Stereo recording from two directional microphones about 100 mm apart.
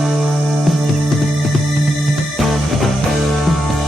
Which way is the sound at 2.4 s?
Centre (ahead or behind).